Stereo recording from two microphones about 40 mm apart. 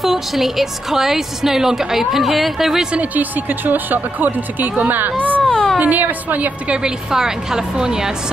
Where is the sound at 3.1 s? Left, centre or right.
Right.